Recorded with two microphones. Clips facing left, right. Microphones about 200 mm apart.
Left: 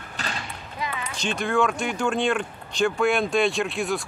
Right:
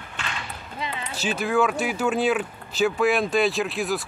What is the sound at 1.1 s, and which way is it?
Speech, 5° right (ahead or behind).